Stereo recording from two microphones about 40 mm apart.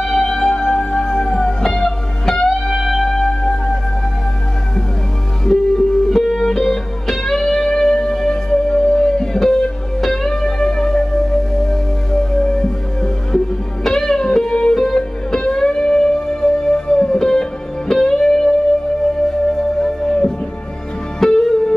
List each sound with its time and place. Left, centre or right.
0.0 s music: centre
2.7 s music: centre
3.2 s music: centre
5.4 s music: centre
19.5 s music: centre
21.2 s music: centre